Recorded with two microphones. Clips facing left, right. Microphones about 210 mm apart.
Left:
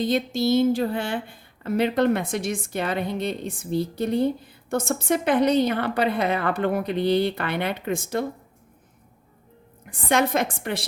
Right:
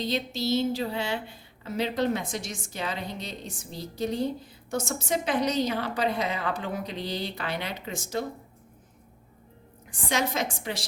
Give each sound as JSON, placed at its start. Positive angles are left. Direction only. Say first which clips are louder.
{"t": 0.0, "sound": "speech", "louder": "left 7 dB", "side_deg": 50}
{"t": 9.9, "sound": "speech", "louder": "left 7 dB", "side_deg": 55}